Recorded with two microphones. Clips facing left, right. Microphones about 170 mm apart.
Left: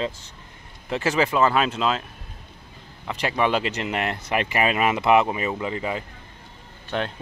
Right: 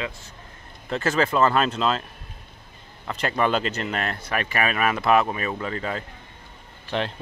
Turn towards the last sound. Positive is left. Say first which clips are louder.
# even
turn(degrees=0)  # may be behind; listen again after turning